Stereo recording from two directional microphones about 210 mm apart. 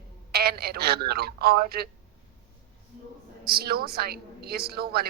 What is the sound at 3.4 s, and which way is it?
Speech, 50° right (ahead or behind).